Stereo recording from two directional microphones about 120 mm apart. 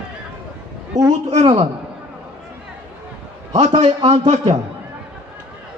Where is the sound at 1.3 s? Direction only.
60° right (ahead or behind).